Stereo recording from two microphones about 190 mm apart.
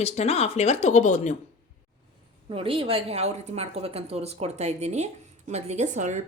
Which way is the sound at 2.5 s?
30° right (ahead or behind).